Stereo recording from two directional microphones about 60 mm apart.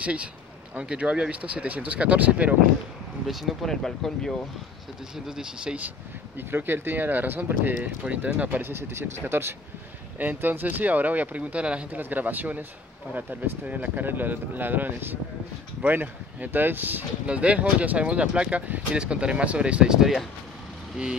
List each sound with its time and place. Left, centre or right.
0.0 s speech: right
3.3 s speech: centre
5.1 s speech: centre
6.3 s speech: right
8.0 s speech: right
8.5 s speech: right
17.3 s speech: right